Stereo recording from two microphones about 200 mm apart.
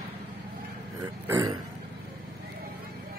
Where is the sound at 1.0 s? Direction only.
15° right (ahead or behind).